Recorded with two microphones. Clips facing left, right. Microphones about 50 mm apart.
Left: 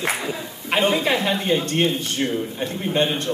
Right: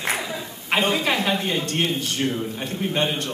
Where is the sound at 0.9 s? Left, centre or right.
Left.